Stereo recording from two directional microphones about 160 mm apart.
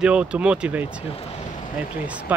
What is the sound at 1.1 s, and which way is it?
Speech, 35° left (ahead or behind).